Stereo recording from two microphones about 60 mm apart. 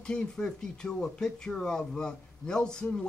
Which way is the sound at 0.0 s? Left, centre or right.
Centre.